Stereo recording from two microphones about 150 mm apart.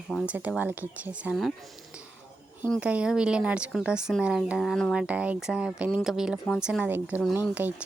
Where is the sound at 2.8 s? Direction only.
10° right (ahead or behind).